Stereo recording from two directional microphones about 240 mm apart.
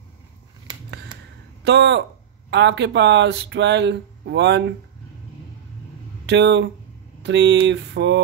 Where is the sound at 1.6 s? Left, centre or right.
Right.